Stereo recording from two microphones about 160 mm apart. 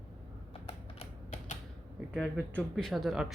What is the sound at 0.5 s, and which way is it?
Typing, 35° left (ahead or behind).